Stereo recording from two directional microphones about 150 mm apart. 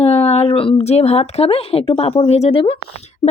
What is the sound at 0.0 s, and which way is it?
A woman's voice, 45° left (ahead or behind).